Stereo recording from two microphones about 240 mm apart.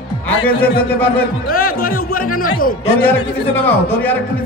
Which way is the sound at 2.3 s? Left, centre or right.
Left.